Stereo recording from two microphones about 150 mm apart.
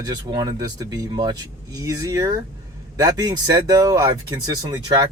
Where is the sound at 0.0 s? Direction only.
25° right (ahead or behind).